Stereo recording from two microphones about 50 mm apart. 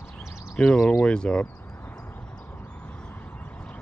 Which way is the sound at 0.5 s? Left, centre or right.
Centre.